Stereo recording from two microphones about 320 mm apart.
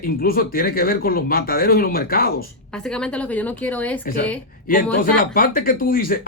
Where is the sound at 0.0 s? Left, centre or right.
Left.